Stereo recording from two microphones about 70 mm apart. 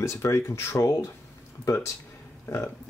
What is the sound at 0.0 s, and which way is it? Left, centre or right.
Speech, left.